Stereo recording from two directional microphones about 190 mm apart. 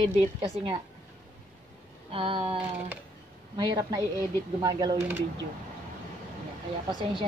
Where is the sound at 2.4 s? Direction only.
10° right (ahead or behind).